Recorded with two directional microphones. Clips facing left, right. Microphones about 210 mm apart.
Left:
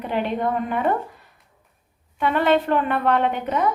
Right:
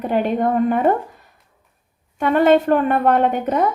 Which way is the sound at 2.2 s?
45° right (ahead or behind).